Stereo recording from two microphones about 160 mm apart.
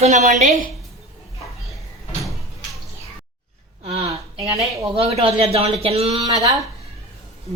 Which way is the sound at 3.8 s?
40° right (ahead or behind).